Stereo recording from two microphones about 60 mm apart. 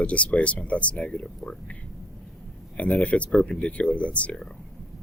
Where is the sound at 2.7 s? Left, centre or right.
Left.